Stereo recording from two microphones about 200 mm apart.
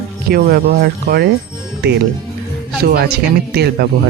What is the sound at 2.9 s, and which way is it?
Speech, 50° right (ahead or behind).